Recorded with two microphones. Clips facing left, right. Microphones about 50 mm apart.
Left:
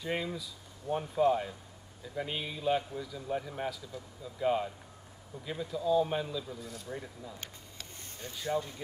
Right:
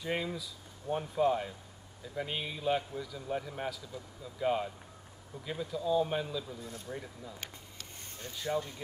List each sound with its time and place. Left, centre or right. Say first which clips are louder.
0.0 s a man's voice: even; centre
6.6 s speech: even; right
6.9 s a man's voice: left 1 dB; centre
8.4 s a man's voice: left 1 dB; centre